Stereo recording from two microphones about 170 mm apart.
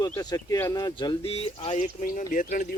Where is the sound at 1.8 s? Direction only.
50° left (ahead or behind).